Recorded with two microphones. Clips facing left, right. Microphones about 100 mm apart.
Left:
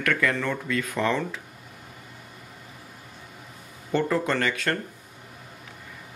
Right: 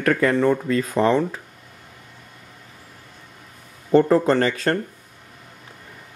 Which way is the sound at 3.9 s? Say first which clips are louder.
Right 9 dB; 35° right (ahead or behind).